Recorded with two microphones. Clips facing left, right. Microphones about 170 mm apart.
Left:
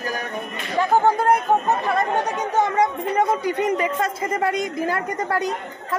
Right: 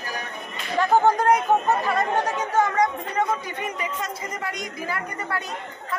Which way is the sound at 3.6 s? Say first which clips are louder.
Left 9 dB; 55° left (ahead or behind).